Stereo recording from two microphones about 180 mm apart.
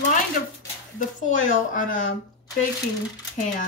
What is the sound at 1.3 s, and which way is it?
Speech, 45° left (ahead or behind).